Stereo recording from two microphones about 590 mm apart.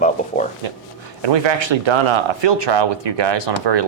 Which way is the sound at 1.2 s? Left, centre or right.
Right.